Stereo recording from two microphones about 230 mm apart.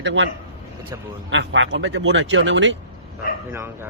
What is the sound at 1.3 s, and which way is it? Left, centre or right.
Speech, right.